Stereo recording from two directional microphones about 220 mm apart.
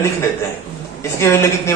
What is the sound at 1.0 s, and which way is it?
Speech, 10° left (ahead or behind).